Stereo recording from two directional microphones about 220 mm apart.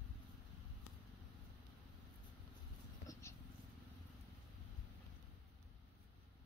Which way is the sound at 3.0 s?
15° left (ahead or behind).